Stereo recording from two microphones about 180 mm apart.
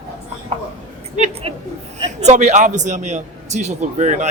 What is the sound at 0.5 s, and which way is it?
A man's voice, 35° right (ahead or behind).